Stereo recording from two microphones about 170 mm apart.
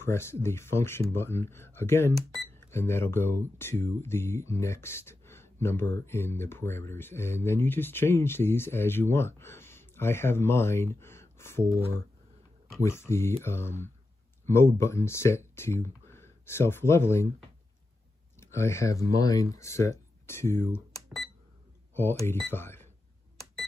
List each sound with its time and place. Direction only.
0.0 s speech: 15° left (ahead or behind)
12.8 s speech: 15° left (ahead or behind)
14.4 s a sound: 15° left (ahead or behind)
14.8 s speech: 15° left (ahead or behind)
18.4 s speech: 15° left (ahead or behind)
21.9 s speech: 15° left (ahead or behind)